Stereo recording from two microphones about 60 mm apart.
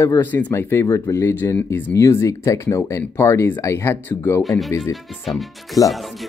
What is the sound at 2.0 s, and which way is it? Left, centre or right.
Speech, left.